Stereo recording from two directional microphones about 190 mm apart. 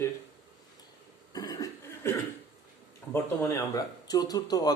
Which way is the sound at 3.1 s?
15° left (ahead or behind).